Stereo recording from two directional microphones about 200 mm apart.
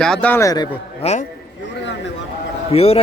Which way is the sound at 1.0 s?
30° left (ahead or behind).